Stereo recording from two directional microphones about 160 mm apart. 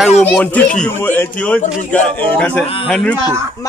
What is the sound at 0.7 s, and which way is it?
A man's voice, 15° left (ahead or behind).